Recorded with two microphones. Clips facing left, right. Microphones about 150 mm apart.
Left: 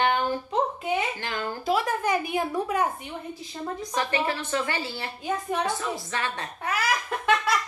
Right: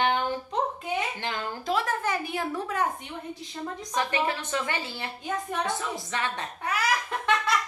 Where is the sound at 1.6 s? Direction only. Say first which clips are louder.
Left 3 dB; 10° left (ahead or behind).